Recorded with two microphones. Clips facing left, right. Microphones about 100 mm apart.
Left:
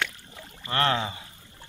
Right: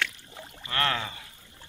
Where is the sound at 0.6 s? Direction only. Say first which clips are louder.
Left 4 dB; 30° left (ahead or behind).